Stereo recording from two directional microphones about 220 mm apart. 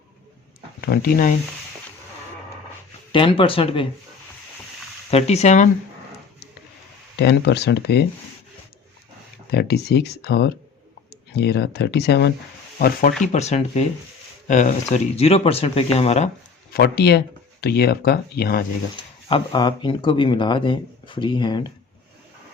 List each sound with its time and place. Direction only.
0.9 s speech: 45° left (ahead or behind)
3.1 s speech: 20° left (ahead or behind)
5.1 s speech: 30° left (ahead or behind)
7.2 s speech: 50° left (ahead or behind)
9.5 s speech: 45° left (ahead or behind); by 16.3 s 30° left (ahead or behind)
16.7 s speech: 45° left (ahead or behind)
18.9 s speech: 20° left (ahead or behind)